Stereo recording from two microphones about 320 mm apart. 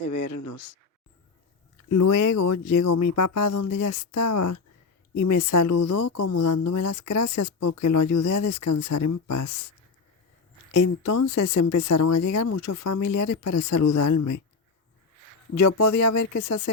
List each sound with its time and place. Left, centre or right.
0.1 s speech: left
1.9 s speech: left
10.8 s speech: left
15.5 s speech: left